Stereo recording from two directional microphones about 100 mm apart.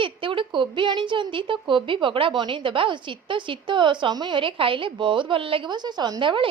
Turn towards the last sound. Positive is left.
turn(degrees=-55)  # may be behind; listen again after turning